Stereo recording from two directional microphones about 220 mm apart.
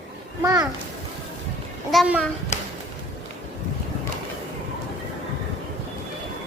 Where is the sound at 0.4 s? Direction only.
15° right (ahead or behind).